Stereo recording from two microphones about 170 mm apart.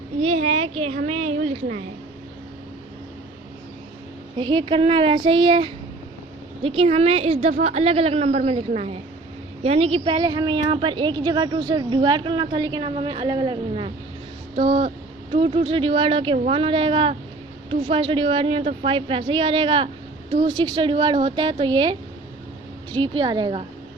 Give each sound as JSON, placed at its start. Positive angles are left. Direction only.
{"t": 0.8, "sound": "a woman's voice", "side_deg": -35}
{"t": 4.4, "sound": "a woman's voice", "side_deg": -30}